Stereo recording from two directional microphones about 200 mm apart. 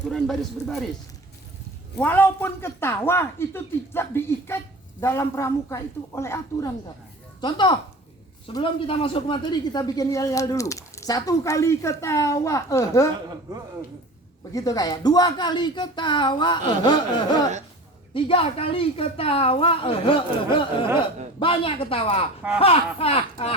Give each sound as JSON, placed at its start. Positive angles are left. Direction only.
{"t": 0.1, "sound": "speech", "side_deg": 0}
{"t": 2.0, "sound": "a woman's voice", "side_deg": 10}
{"t": 14.5, "sound": "a woman's voice", "side_deg": 20}